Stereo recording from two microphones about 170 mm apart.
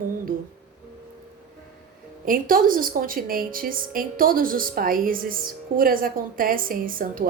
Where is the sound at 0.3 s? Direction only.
55° right (ahead or behind).